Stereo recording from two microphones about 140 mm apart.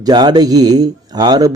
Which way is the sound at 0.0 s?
30° right (ahead or behind).